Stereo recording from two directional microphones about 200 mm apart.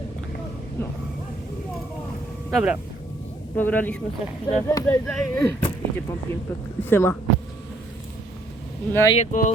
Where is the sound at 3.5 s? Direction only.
10° left (ahead or behind).